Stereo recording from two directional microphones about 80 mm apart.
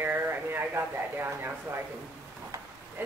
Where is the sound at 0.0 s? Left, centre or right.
Right.